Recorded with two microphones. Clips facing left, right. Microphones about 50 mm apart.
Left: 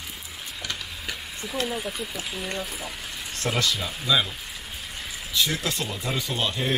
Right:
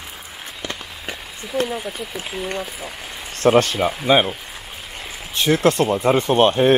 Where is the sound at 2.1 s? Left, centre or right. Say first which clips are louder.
Right 5 dB; right.